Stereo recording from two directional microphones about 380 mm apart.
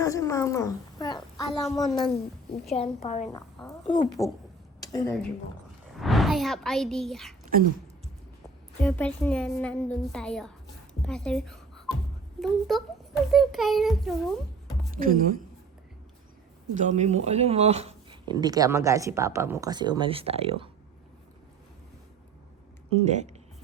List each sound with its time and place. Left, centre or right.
0.0 s a woman's voice: centre
2.7 s a woman's voice: centre
8.8 s a woman's voice: centre
14.9 s speech: right
16.7 s speech: centre
23.0 s speech: centre